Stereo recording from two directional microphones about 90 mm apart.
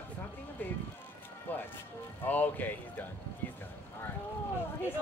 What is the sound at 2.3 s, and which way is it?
Speech, 20° left (ahead or behind).